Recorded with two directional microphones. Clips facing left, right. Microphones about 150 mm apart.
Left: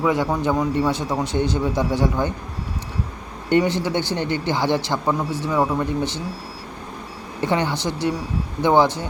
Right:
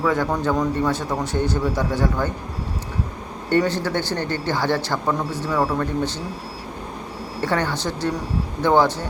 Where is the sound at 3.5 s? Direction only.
15° left (ahead or behind).